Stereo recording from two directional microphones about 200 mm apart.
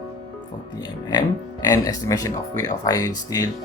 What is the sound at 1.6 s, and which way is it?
Speech, 15° left (ahead or behind).